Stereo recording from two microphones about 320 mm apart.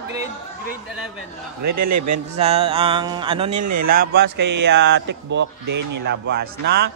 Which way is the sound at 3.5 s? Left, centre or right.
Right.